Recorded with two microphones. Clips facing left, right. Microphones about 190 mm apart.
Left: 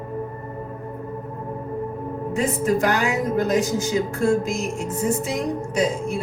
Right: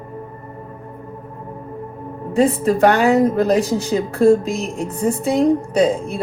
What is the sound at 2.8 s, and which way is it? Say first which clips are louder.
Speech: right 8 dB; 60° right (ahead or behind).